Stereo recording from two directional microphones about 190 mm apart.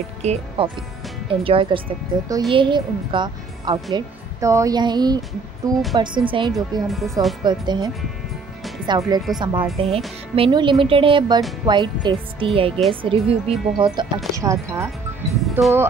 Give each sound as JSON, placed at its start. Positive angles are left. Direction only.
{"t": 0.2, "sound": "a woman's voice", "side_deg": -35}
{"t": 6.9, "sound": "speech", "side_deg": 0}
{"t": 7.4, "sound": "a woman's voice", "side_deg": -25}
{"t": 8.8, "sound": "a woman's voice", "side_deg": -20}
{"t": 13.9, "sound": "speech", "side_deg": -20}